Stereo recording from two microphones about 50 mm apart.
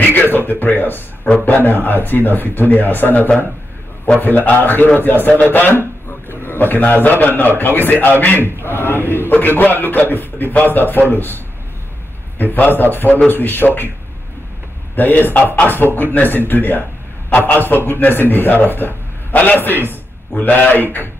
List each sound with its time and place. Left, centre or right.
0.0 s a man's voice: left
8.6 s chant: left
9.3 s speech: left
12.5 s speech: left
15.0 s speech: left
15.6 s chant: left
16.0 s a man's voice: left